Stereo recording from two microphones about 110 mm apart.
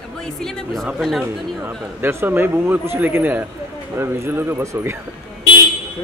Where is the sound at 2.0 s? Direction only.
20° right (ahead or behind).